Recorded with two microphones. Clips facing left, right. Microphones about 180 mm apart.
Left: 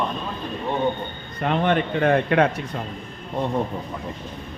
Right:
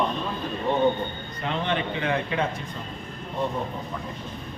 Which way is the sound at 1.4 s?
55° left (ahead or behind).